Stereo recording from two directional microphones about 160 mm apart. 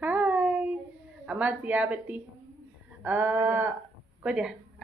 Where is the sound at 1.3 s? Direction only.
10° right (ahead or behind).